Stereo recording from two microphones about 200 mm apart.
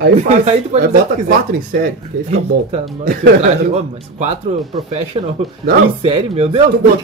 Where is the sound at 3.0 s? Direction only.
35° right (ahead or behind).